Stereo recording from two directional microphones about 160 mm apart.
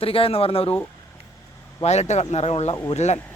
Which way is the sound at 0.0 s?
35° left (ahead or behind).